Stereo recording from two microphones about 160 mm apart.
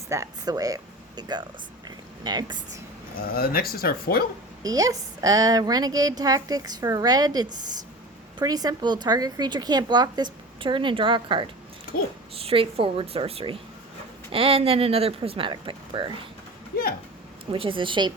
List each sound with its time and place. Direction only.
0.1 s a woman's voice: 20° right (ahead or behind)
3.3 s speech: 70° left (ahead or behind)
4.6 s a woman's voice: 20° right (ahead or behind)
17.5 s speech: 30° right (ahead or behind)